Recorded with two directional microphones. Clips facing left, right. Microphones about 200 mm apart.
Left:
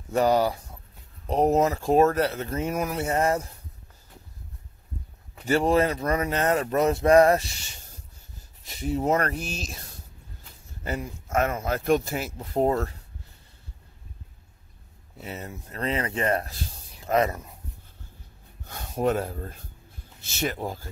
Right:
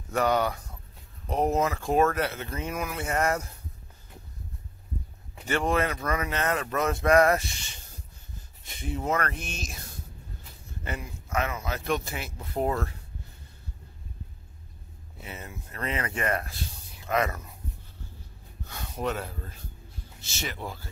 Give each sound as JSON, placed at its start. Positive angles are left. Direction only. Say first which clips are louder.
{"t": 0.1, "sound": "speech", "louder": "left 4 dB", "side_deg": 30}
{"t": 5.4, "sound": "speech", "louder": "left 5 dB", "side_deg": 35}
{"t": 10.8, "sound": "speech", "louder": "left 5 dB", "side_deg": 40}
{"t": 15.2, "sound": "speech", "louder": "left 5 dB", "side_deg": 35}
{"t": 18.6, "sound": "speech", "louder": "left 6 dB", "side_deg": 50}